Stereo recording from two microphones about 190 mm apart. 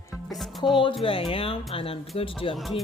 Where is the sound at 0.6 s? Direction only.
25° left (ahead or behind).